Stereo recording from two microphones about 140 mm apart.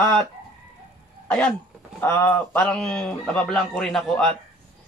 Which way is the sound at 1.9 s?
15° left (ahead or behind).